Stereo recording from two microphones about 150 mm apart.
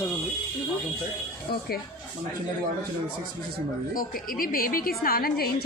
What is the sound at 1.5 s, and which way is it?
Speech, 90° left.